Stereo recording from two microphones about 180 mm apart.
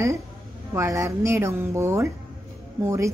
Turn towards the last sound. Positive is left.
turn(degrees=-15)  # may be behind; listen again after turning